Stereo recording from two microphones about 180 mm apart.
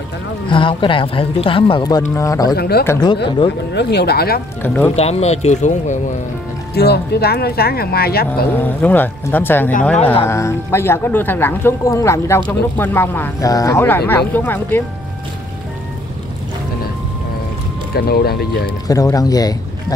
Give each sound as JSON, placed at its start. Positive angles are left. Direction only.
{"t": 0.5, "sound": "speech", "side_deg": 25}
{"t": 2.5, "sound": "speech", "side_deg": 60}
{"t": 2.8, "sound": "speech", "side_deg": 15}
{"t": 3.7, "sound": "speech", "side_deg": 65}
{"t": 4.6, "sound": "speech", "side_deg": 10}
{"t": 4.9, "sound": "speech", "side_deg": 35}
{"t": 6.7, "sound": "speech", "side_deg": 65}
{"t": 8.5, "sound": "speech", "side_deg": 10}
{"t": 17.9, "sound": "speech", "side_deg": 60}
{"t": 18.9, "sound": "speech", "side_deg": 20}